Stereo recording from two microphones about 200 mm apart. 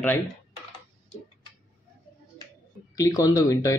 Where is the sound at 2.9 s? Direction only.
20° left (ahead or behind).